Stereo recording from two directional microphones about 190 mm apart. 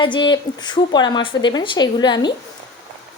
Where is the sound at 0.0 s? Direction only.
25° left (ahead or behind).